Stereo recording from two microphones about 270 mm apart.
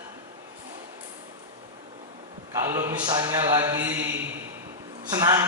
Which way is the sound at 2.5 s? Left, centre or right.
Centre.